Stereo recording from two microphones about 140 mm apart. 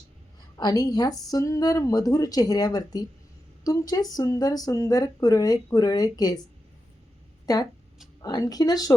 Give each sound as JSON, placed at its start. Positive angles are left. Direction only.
{"t": 0.5, "sound": "speech", "side_deg": 25}
{"t": 7.4, "sound": "speech", "side_deg": 25}